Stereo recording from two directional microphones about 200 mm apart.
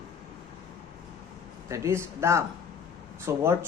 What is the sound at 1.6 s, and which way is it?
Speech, 15° right (ahead or behind).